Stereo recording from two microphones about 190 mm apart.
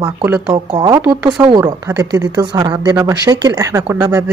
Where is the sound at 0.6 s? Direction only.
20° right (ahead or behind).